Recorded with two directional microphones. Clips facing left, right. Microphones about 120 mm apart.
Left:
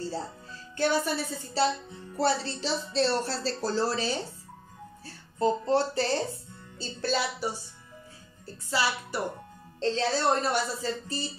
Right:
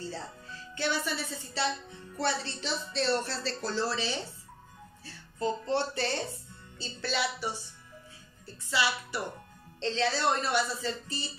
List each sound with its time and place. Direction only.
0.0 s speech: 35° left (ahead or behind)
8.6 s speech: 40° left (ahead or behind)